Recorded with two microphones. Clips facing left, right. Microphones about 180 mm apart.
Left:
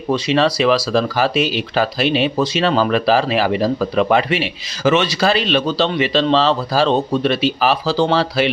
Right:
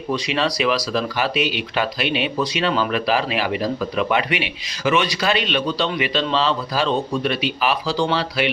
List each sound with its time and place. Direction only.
0.1 s speech: 35° left (ahead or behind)
6.8 s speech: 75° left (ahead or behind)
7.2 s speech: 35° left (ahead or behind)